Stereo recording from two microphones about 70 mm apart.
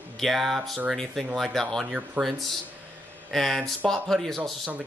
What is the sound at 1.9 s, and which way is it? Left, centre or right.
Speech, centre.